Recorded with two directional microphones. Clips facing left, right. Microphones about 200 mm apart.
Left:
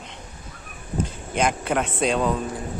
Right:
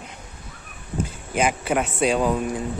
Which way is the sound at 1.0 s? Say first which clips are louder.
Right 1 dB; 5° right (ahead or behind).